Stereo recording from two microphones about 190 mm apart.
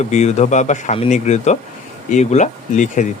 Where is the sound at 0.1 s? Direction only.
35° left (ahead or behind).